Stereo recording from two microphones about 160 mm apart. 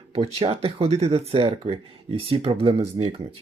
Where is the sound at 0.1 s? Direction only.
35° right (ahead or behind).